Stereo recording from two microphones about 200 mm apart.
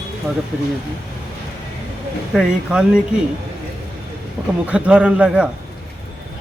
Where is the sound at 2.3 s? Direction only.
Centre (ahead or behind).